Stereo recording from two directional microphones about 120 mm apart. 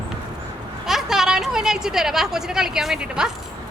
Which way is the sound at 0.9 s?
5° right (ahead or behind).